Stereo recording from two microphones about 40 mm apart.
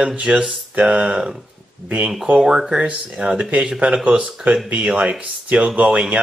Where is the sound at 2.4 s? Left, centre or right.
Centre; by 4.5 s right.